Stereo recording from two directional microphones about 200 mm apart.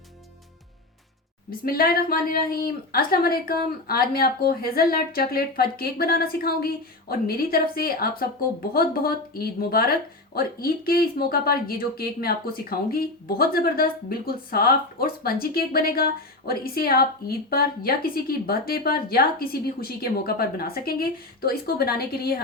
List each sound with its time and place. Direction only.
1.5 s speech: 50° left (ahead or behind)